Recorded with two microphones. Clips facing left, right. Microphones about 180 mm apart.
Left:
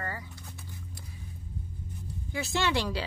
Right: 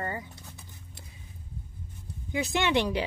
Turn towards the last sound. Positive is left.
turn(degrees=-20)  # may be behind; listen again after turning